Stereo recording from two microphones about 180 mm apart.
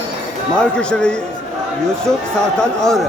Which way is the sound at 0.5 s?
5° left (ahead or behind).